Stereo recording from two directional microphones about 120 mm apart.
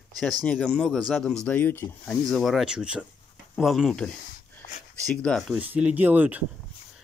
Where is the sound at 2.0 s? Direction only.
Centre (ahead or behind).